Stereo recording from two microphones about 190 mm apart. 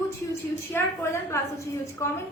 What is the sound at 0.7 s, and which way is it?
A woman's voice, 15° left (ahead or behind).